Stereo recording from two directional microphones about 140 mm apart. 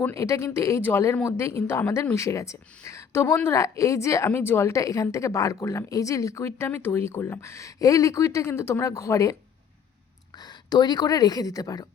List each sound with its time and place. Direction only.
0.0 s a woman's voice: 20° left (ahead or behind)
10.3 s speech: 30° left (ahead or behind)